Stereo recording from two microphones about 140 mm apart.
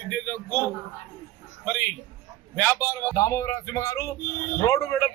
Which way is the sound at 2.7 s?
15° left (ahead or behind).